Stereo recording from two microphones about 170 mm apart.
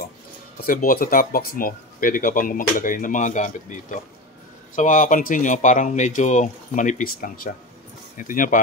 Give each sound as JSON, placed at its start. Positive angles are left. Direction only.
{"t": 0.7, "sound": "speech", "side_deg": 55}